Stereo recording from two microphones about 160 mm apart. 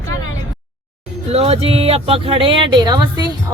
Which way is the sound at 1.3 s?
40° right (ahead or behind).